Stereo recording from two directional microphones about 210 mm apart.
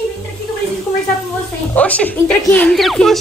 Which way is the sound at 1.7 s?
5° left (ahead or behind).